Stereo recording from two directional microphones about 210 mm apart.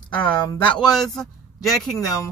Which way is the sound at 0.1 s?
5° left (ahead or behind).